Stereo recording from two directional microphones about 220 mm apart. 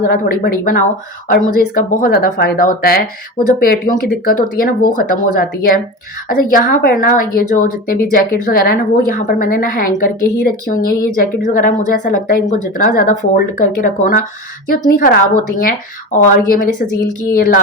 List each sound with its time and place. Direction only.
0.1 s speech: 40° left (ahead or behind)